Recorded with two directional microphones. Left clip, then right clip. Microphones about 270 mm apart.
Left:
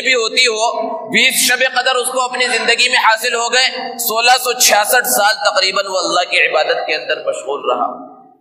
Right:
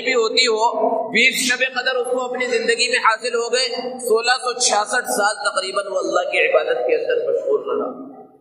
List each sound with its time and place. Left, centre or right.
0.0 s a man's voice: left